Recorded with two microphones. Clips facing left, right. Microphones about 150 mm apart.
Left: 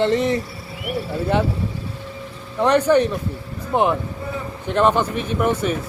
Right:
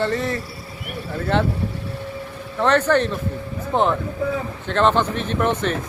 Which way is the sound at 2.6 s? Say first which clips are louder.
Left 2 dB; 10° left (ahead or behind).